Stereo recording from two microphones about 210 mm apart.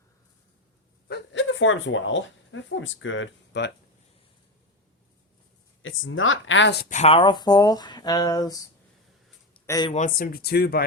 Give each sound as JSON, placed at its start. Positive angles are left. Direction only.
{"t": 1.0, "sound": "speech", "side_deg": 55}
{"t": 5.8, "sound": "speech", "side_deg": 70}
{"t": 6.8, "sound": "speech", "side_deg": 35}
{"t": 9.6, "sound": "speech", "side_deg": 15}
{"t": 9.9, "sound": "speech", "side_deg": 40}